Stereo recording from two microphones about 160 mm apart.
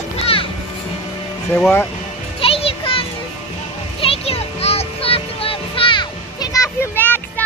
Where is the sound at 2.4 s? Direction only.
35° left (ahead or behind); by 7.4 s 10° left (ahead or behind).